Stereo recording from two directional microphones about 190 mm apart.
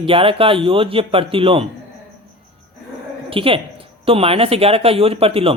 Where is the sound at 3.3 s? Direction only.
30° right (ahead or behind).